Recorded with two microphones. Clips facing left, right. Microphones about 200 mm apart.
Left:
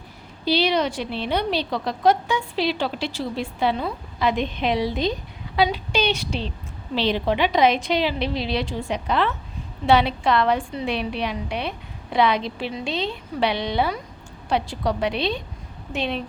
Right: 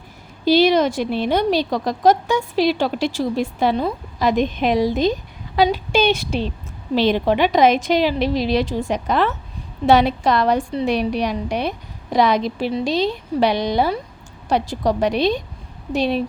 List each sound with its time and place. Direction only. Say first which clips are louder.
0.4 s a woman's voice: right 6 dB; 45° right (ahead or behind)